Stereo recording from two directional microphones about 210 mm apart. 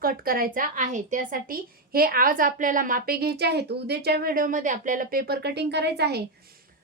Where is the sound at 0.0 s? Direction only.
45° right (ahead or behind).